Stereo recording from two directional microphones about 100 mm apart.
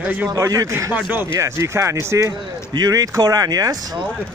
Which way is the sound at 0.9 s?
20° right (ahead or behind).